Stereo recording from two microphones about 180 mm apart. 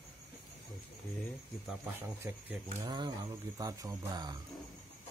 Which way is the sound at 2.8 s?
25° right (ahead or behind).